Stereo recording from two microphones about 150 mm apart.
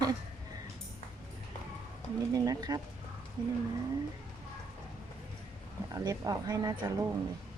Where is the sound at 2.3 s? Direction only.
25° right (ahead or behind).